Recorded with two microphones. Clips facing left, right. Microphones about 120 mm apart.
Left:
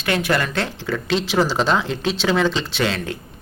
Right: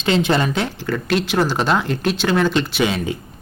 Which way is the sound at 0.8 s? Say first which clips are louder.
Right 2 dB; 5° right (ahead or behind).